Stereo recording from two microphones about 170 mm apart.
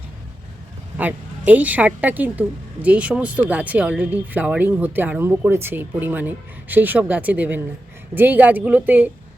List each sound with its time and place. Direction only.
0.9 s a woman's voice: 10° right (ahead or behind)